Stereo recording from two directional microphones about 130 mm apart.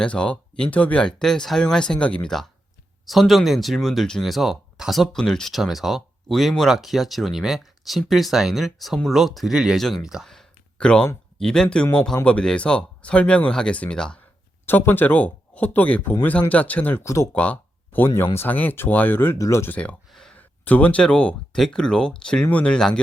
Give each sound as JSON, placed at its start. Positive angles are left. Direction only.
{"t": 0.0, "sound": "speech", "side_deg": 10}
{"t": 17.3, "sound": "speech", "side_deg": 10}